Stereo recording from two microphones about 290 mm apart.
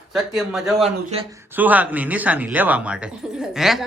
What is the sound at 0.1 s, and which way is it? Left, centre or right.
Speech, centre.